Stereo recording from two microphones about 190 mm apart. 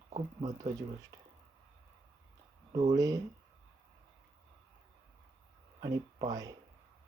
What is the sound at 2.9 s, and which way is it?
Speech, 20° right (ahead or behind).